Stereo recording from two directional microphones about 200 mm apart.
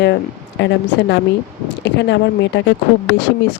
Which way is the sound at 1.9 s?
60° left (ahead or behind).